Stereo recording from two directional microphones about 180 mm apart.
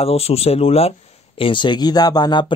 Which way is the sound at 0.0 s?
35° left (ahead or behind).